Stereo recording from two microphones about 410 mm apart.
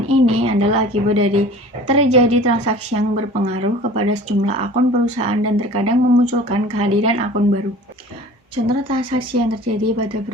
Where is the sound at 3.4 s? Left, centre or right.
Centre.